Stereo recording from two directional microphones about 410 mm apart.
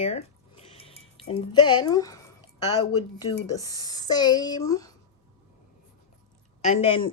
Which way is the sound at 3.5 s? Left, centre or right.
Centre.